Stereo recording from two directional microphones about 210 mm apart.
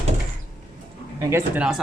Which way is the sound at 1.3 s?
5° right (ahead or behind).